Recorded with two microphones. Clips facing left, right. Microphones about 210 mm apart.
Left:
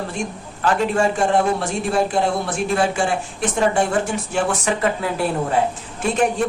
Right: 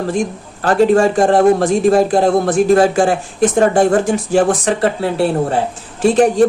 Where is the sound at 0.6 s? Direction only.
40° right (ahead or behind).